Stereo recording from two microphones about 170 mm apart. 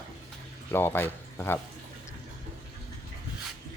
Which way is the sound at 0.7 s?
10° left (ahead or behind).